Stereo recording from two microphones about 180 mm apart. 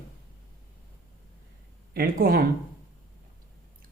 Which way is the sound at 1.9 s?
55° right (ahead or behind).